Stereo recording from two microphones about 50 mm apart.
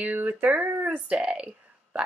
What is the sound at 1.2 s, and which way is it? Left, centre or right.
Speech, centre.